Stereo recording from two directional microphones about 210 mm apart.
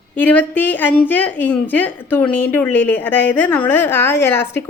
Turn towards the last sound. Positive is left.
turn(degrees=10)  # may be behind; listen again after turning